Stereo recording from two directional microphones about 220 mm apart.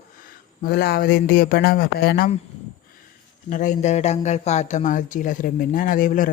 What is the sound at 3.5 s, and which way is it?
Speech, 35° left (ahead or behind).